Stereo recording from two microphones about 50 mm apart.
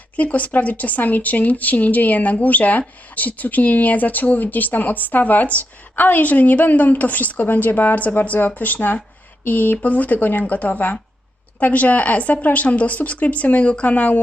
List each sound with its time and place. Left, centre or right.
0.2 s a woman's voice: left